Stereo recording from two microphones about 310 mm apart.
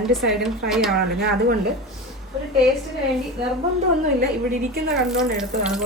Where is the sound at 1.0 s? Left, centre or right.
Right.